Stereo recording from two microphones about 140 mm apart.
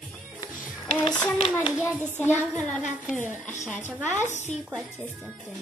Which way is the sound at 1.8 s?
15° left (ahead or behind).